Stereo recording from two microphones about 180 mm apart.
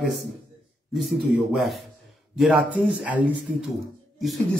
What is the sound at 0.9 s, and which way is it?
Speech, centre (ahead or behind).